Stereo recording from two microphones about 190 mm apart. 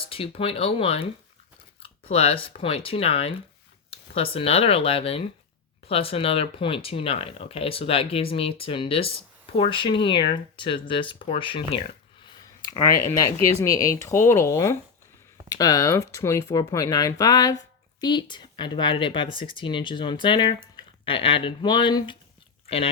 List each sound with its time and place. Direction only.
0.1 s speech: 30° left (ahead or behind)
12.8 s speech: 15° left (ahead or behind)